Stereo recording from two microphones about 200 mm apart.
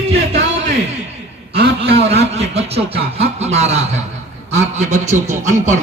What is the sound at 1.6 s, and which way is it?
Speech, 55° right (ahead or behind).